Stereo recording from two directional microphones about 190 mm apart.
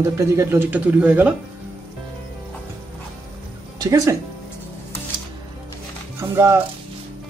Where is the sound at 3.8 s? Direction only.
15° right (ahead or behind).